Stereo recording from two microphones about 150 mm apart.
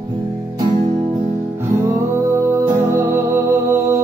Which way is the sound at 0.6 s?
30° right (ahead or behind).